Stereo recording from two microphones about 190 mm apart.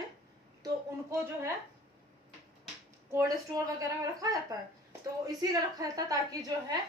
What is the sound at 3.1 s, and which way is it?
A woman's voice, 15° right (ahead or behind).